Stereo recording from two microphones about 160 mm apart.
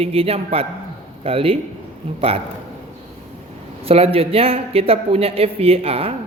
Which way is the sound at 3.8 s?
40° right (ahead or behind).